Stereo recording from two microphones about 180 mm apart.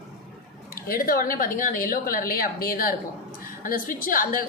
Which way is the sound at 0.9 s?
50° left (ahead or behind).